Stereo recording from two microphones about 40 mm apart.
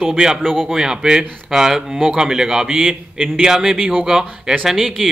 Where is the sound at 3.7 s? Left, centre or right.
Right.